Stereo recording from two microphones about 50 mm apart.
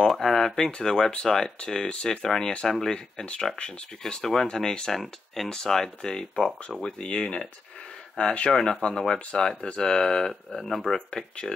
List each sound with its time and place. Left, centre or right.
0.0 s a sound: centre
0.7 s speech: centre
11.1 s speech: centre